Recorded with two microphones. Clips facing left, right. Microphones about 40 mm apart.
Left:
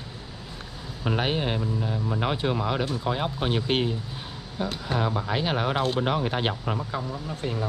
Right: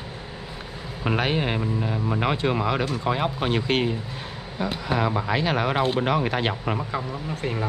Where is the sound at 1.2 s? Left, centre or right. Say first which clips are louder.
Right 2 dB; centre.